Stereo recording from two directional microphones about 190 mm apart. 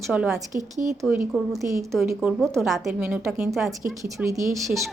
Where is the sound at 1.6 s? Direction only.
15° right (ahead or behind).